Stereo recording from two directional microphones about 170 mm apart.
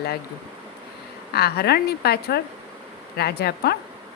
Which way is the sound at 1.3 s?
70° left (ahead or behind).